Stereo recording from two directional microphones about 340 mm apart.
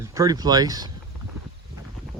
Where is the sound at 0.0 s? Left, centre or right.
Centre.